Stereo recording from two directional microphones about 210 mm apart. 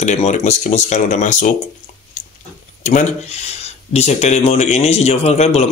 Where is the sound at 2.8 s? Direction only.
35° left (ahead or behind).